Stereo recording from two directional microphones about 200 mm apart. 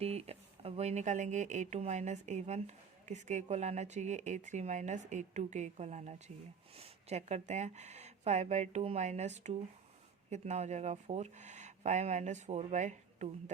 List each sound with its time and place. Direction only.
0.0 s speech: 30° right (ahead or behind)